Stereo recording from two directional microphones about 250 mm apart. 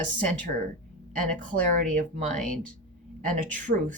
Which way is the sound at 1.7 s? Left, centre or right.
Right.